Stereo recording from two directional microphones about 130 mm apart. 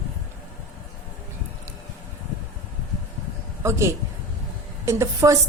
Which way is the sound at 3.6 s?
20° right (ahead or behind).